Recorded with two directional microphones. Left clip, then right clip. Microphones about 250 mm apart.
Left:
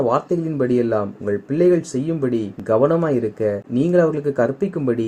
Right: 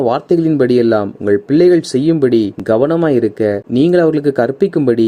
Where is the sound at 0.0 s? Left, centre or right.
Right.